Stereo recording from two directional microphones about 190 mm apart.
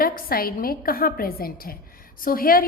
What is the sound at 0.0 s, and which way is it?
A woman's voice, 50° left (ahead or behind).